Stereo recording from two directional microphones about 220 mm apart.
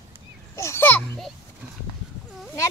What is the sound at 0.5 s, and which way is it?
Speech, 10° left (ahead or behind).